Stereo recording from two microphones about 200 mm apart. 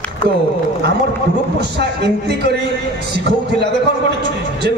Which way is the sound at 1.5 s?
55° right (ahead or behind).